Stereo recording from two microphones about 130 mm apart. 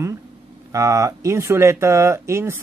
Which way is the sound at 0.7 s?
25° right (ahead or behind).